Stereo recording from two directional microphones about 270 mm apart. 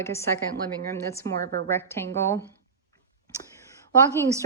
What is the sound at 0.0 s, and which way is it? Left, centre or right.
Speech, centre.